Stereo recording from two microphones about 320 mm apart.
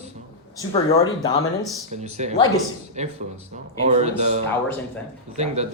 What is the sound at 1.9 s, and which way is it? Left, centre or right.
A man's voice, right.